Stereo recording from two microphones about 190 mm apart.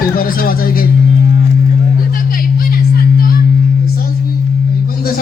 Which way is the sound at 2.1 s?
50° left (ahead or behind).